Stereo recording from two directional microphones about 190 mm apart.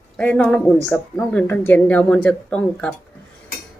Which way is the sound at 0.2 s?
5° left (ahead or behind).